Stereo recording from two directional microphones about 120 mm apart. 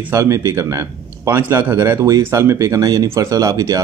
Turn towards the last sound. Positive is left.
turn(degrees=-30)  # may be behind; listen again after turning